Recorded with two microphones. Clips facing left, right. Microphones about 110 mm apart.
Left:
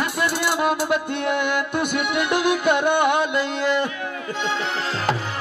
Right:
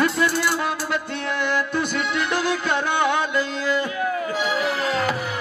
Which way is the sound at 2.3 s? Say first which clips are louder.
Left 6 dB; 60° left (ahead or behind).